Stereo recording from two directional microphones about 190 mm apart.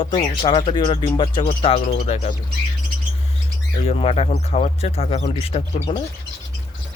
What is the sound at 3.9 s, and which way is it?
Speech, 35° left (ahead or behind).